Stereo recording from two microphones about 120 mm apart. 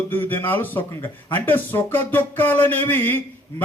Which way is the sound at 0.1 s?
15° left (ahead or behind).